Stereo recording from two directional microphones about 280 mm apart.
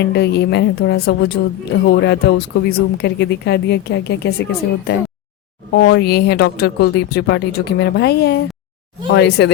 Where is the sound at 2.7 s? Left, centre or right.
Left.